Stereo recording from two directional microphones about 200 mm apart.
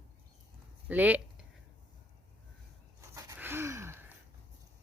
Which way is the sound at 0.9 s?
10° right (ahead or behind).